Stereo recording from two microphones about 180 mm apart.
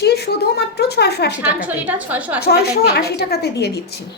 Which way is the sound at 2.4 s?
60° left (ahead or behind).